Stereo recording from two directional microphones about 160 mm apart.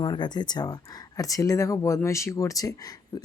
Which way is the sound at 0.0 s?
25° left (ahead or behind).